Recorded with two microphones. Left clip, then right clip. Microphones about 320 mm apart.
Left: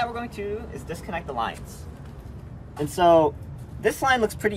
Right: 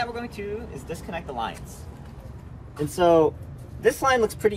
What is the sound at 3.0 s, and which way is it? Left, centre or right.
Speech, centre.